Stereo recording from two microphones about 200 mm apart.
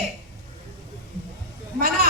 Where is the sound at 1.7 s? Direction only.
50° right (ahead or behind).